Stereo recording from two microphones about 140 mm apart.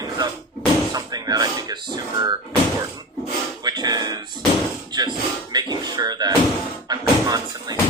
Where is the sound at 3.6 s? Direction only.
30° right (ahead or behind).